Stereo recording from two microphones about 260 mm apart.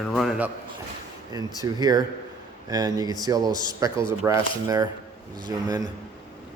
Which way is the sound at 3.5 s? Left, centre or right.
Centre.